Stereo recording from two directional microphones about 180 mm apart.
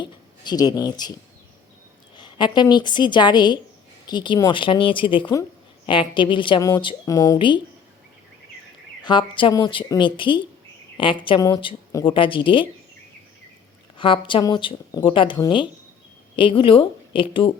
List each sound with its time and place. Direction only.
0.0 s speech: 20° left (ahead or behind)
2.1 s speech: 25° left (ahead or behind)
7.3 s speech: 25° left (ahead or behind)
9.0 s speech: 25° left (ahead or behind)
14.0 s speech: 30° left (ahead or behind)